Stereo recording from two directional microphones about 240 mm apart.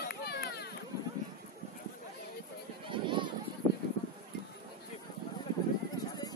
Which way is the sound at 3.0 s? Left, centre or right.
Centre.